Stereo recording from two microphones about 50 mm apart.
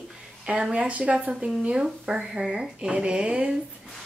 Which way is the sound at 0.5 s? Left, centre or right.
Right.